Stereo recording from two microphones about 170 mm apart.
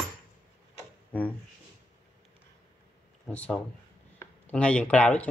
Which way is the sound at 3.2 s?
10° left (ahead or behind).